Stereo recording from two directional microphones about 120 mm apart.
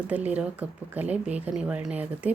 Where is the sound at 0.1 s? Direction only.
10° right (ahead or behind).